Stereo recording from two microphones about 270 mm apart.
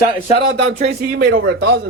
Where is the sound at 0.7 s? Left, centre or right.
Right.